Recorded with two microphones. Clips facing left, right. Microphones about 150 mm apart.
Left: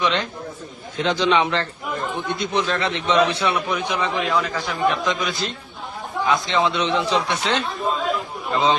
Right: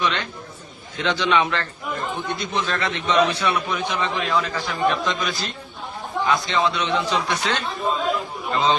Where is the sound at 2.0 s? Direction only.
Centre (ahead or behind).